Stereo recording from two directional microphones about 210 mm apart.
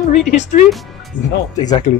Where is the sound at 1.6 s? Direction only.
20° left (ahead or behind).